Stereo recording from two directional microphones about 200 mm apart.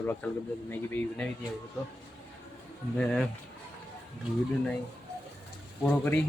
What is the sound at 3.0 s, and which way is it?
Speech, 5° left (ahead or behind).